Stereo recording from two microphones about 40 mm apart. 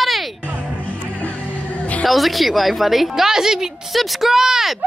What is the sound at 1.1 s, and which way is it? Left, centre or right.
Music, left.